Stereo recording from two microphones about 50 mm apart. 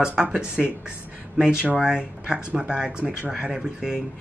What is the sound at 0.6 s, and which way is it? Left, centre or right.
Speech, centre.